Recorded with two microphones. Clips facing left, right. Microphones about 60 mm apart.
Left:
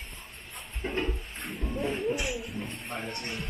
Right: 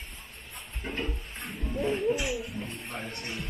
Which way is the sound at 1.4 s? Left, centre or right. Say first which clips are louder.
Right 2 dB; centre.